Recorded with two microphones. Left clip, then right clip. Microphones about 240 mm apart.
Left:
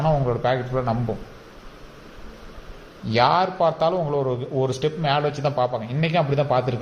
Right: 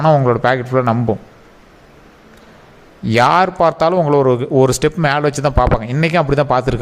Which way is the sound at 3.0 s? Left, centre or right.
Right.